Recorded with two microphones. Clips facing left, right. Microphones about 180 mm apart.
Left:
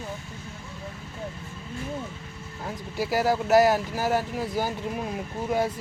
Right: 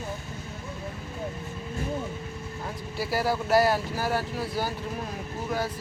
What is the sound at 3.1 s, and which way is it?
Speech, 15° left (ahead or behind).